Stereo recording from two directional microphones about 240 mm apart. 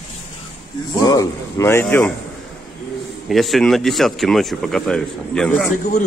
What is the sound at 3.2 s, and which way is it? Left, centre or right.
Speech, centre.